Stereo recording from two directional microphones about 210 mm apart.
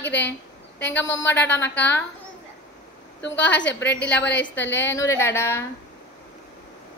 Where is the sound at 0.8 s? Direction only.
10° left (ahead or behind).